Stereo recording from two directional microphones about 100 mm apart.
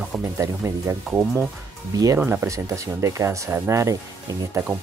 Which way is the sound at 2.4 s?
30° right (ahead or behind).